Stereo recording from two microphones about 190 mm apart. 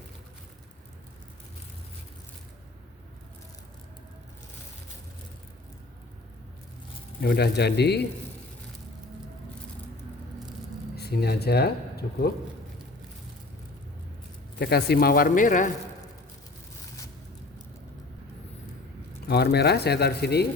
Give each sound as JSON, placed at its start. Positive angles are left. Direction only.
{"t": 7.2, "sound": "speech", "side_deg": 60}
{"t": 10.9, "sound": "speech", "side_deg": 55}
{"t": 14.6, "sound": "speech", "side_deg": 60}
{"t": 19.3, "sound": "speech", "side_deg": 60}